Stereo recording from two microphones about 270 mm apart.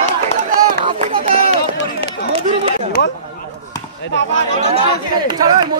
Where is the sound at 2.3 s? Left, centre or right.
Right.